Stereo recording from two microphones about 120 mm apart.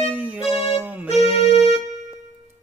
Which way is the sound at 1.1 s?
55° left (ahead or behind).